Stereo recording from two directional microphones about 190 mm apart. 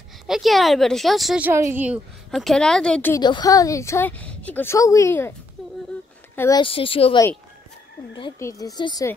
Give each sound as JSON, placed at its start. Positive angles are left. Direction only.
{"t": 0.3, "sound": "speech", "side_deg": 0}
{"t": 3.2, "sound": "a woman's voice", "side_deg": 20}
{"t": 5.6, "sound": "speech", "side_deg": 0}
{"t": 6.3, "sound": "speech", "side_deg": 15}
{"t": 6.6, "sound": "speech", "side_deg": 30}